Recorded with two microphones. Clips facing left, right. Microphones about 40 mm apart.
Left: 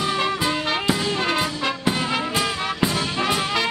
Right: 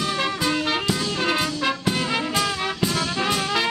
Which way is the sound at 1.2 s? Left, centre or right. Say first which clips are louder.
Even; centre.